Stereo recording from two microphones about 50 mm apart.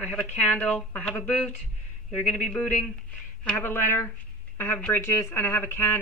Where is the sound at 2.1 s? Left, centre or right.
Centre.